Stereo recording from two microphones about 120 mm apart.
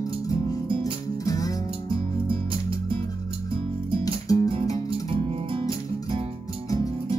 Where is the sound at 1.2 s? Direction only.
30° left (ahead or behind).